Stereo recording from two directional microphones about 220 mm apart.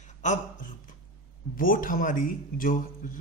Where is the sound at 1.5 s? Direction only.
40° left (ahead or behind).